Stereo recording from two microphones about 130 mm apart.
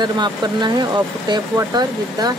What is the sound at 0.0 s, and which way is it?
Speech, 35° right (ahead or behind).